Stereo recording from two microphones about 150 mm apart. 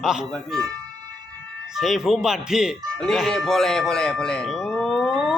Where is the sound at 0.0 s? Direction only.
5° right (ahead or behind).